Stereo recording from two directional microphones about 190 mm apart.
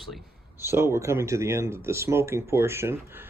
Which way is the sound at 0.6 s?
15° right (ahead or behind).